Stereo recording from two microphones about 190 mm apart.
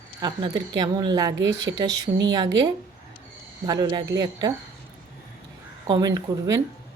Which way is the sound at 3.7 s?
20° right (ahead or behind).